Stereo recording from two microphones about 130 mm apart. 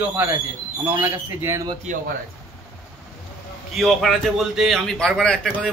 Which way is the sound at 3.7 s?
Centre (ahead or behind).